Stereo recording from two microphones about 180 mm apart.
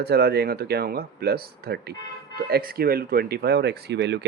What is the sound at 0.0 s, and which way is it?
Speech, 60° right (ahead or behind).